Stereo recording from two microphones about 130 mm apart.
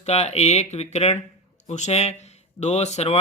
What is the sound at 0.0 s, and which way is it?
Speech, 55° left (ahead or behind).